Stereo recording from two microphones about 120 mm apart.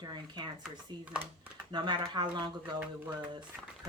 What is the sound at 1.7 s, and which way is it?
Speech, 40° right (ahead or behind).